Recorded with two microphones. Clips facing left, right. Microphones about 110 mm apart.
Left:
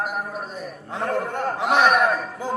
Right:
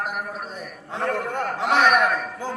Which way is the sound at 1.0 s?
25° left (ahead or behind).